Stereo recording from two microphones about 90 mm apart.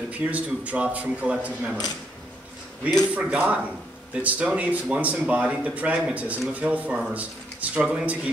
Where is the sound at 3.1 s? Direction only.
15° right (ahead or behind).